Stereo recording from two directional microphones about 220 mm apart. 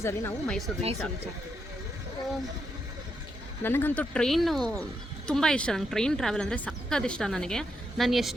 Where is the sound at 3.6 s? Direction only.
10° left (ahead or behind).